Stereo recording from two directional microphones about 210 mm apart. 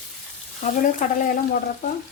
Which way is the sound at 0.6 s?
35° left (ahead or behind).